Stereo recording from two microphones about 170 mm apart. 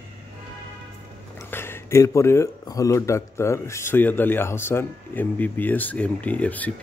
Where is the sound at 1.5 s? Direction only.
15° left (ahead or behind).